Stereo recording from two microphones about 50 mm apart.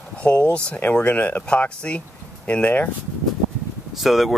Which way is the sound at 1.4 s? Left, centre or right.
Left.